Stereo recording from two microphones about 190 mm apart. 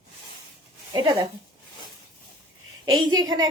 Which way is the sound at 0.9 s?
20° right (ahead or behind).